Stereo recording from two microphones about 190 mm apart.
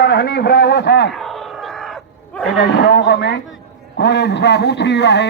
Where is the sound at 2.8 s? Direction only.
65° left (ahead or behind).